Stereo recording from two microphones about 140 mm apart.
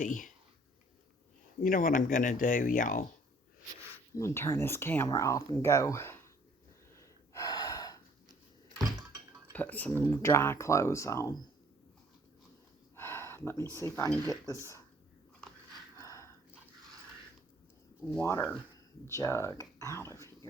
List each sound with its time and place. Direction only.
0.0 s speech: 65° left (ahead or behind)
1.6 s speech: 75° left (ahead or behind)
4.1 s speech: 20° left (ahead or behind)
6.9 s gasp: 25° left (ahead or behind)
9.5 s cutlery: 10° left (ahead or behind)
10.1 s speech: 20° left (ahead or behind)
13.0 s a sound: 15° left (ahead or behind)
13.7 s speech: 20° left (ahead or behind)
16.0 s a sound: 20° left (ahead or behind)
18.2 s speech: 20° left (ahead or behind)